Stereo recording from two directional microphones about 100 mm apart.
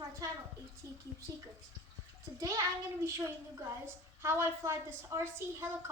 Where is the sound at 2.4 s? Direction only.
35° right (ahead or behind).